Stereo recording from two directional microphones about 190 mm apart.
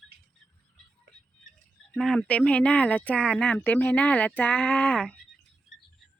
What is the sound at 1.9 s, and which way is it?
Speech, 5° left (ahead or behind).